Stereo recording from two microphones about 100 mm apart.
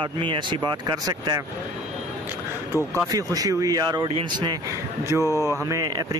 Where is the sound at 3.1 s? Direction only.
40° right (ahead or behind).